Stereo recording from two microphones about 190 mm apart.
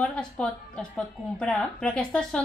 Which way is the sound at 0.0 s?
5° left (ahead or behind).